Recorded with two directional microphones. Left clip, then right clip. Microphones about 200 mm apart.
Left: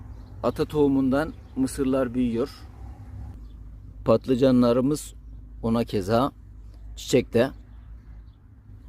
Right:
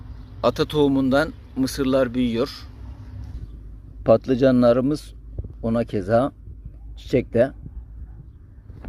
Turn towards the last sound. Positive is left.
turn(degrees=20)  # may be behind; listen again after turning